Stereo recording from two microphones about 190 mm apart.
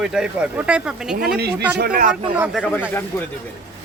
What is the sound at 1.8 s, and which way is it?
Speech, 50° right (ahead or behind).